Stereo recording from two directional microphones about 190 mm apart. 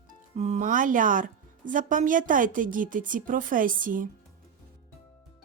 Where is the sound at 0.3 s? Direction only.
35° right (ahead or behind).